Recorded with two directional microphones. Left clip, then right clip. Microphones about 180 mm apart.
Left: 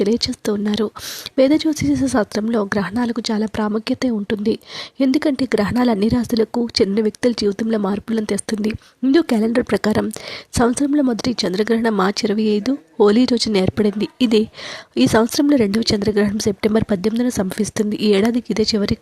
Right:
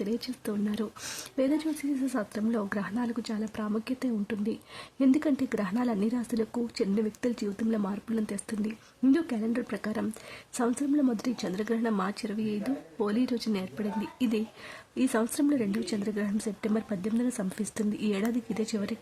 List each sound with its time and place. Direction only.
0.0 s a woman's voice: 40° left (ahead or behind)